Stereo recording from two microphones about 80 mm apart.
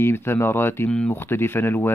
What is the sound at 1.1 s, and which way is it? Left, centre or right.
Speech, left.